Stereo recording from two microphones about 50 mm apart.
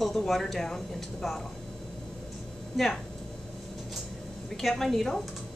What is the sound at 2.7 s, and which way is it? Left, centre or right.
Speech, centre.